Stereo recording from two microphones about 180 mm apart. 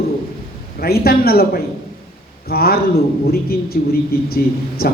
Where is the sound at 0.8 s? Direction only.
60° left (ahead or behind).